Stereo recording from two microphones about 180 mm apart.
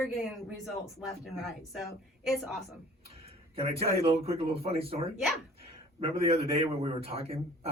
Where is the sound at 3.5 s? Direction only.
35° right (ahead or behind).